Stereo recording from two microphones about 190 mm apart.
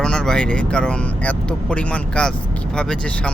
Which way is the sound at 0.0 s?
5° left (ahead or behind).